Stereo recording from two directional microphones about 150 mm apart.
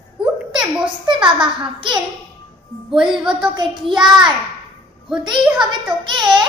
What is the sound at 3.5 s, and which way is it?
Child singing, 30° right (ahead or behind).